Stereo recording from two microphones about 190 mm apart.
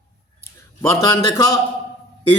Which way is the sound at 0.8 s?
20° left (ahead or behind).